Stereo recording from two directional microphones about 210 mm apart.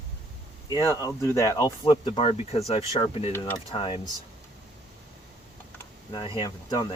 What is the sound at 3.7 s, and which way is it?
Speech, 25° left (ahead or behind).